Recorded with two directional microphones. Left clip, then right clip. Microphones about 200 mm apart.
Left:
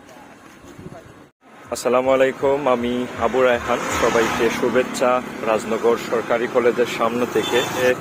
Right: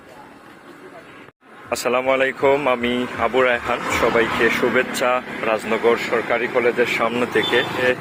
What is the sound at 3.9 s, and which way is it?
Speech, 5° right (ahead or behind).